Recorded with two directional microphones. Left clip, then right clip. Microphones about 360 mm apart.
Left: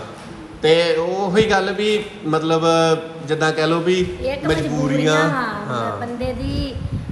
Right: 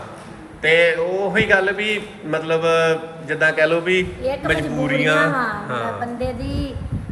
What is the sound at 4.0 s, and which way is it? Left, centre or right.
A woman's voice, centre.